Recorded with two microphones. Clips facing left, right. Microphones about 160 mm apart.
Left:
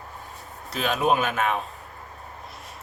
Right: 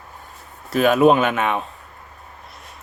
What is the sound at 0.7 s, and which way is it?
Speech, 50° right (ahead or behind).